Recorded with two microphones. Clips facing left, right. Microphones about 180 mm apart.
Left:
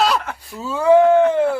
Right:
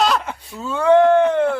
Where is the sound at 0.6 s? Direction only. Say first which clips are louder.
Left 1 dB; 5° left (ahead or behind).